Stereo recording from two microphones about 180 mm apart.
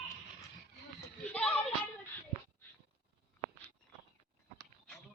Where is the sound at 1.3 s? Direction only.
5° left (ahead or behind).